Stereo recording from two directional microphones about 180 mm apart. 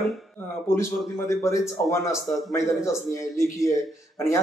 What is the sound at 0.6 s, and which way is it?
A man's voice, 15° left (ahead or behind).